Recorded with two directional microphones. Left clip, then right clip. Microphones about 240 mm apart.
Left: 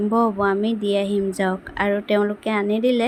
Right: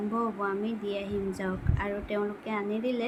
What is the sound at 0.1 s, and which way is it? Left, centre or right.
A woman's voice, left.